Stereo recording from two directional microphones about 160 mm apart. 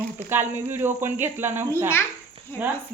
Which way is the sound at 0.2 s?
15° right (ahead or behind).